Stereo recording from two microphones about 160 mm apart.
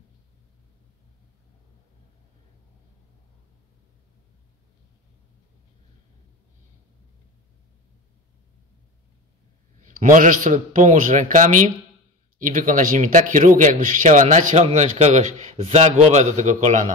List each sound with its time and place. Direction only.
9.8 s a man's voice: 55° right (ahead or behind)